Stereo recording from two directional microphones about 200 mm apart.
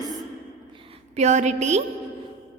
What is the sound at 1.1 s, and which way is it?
Speech, 35° right (ahead or behind).